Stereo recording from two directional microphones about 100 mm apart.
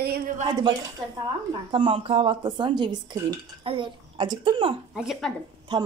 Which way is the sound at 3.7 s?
55° right (ahead or behind).